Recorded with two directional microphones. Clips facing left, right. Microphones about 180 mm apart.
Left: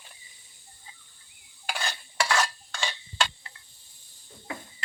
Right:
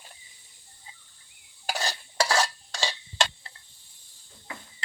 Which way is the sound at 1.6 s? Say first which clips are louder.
Right 3 dB; 35° right (ahead or behind).